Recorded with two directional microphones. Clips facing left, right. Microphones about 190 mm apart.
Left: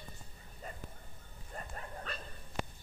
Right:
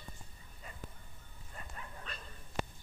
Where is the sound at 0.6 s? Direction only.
45° left (ahead or behind).